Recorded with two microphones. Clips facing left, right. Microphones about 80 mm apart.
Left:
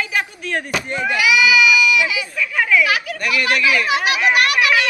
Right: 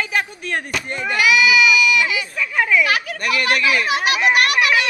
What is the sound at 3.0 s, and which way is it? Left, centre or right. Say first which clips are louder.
Speech: even; right.